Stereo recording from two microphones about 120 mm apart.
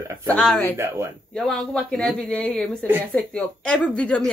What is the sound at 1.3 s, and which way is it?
A woman's voice, 5° left (ahead or behind).